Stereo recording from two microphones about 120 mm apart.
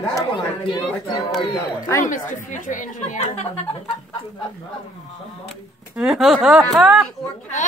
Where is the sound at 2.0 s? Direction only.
90° left.